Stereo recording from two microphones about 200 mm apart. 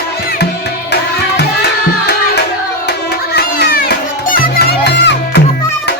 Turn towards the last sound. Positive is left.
turn(degrees=55)  # may be behind; listen again after turning